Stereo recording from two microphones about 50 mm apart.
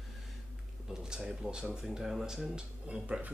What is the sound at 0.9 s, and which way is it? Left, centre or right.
Speech, centre.